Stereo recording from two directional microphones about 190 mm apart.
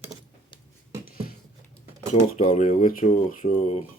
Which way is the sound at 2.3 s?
40° left (ahead or behind).